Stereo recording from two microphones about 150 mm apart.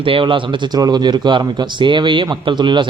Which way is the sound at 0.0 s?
35° right (ahead or behind).